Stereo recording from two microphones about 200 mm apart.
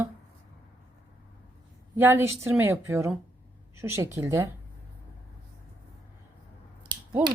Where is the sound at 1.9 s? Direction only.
10° right (ahead or behind).